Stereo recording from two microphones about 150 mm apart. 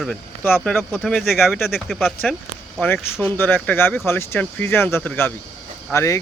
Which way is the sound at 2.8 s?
15° left (ahead or behind).